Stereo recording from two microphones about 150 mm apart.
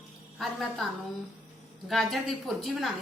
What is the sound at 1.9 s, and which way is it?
A woman's voice, centre (ahead or behind).